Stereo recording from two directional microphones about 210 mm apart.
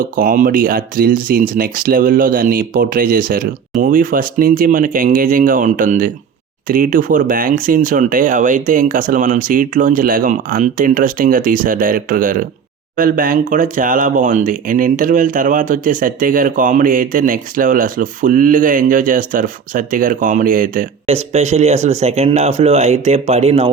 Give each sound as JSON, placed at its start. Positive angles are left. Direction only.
{"t": 0.0, "sound": "speech", "side_deg": -40}